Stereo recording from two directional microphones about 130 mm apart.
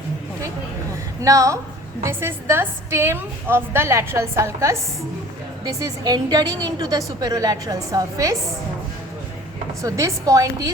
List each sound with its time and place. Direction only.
1.2 s a woman's voice: 25° right (ahead or behind)
9.8 s a woman's voice: 25° right (ahead or behind)